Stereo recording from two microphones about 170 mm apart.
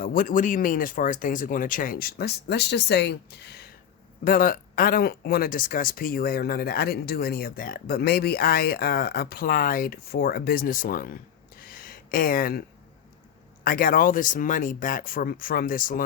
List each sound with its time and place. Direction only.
0.0 s speech: 55° left (ahead or behind); by 3.7 s 75° left (ahead or behind)
4.2 s speech: 55° left (ahead or behind)
11.5 s a sound: 60° left (ahead or behind)
13.7 s speech: 60° left (ahead or behind)